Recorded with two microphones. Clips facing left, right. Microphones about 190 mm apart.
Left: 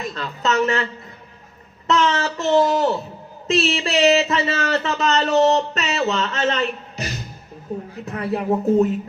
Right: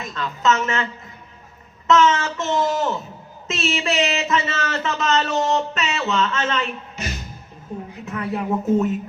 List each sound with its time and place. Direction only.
0.0 s speech: 35° left (ahead or behind)
1.9 s speech: 35° left (ahead or behind)